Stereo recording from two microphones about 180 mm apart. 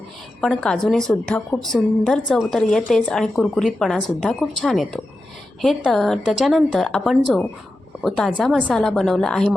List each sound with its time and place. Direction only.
0.4 s a woman's voice: 5° left (ahead or behind)